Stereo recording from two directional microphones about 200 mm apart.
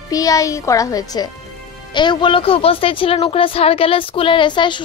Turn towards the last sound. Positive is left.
turn(degrees=25)  # may be behind; listen again after turning